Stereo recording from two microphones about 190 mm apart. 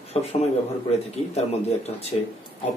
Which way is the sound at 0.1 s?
35° left (ahead or behind).